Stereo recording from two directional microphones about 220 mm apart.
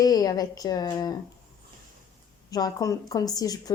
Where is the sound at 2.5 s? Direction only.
15° left (ahead or behind).